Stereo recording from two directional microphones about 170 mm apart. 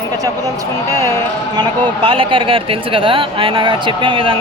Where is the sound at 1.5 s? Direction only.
25° right (ahead or behind).